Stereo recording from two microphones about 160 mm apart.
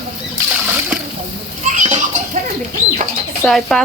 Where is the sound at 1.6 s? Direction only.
50° right (ahead or behind).